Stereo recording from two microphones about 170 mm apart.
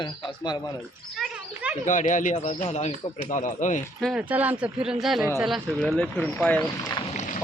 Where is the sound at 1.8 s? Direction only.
50° left (ahead or behind).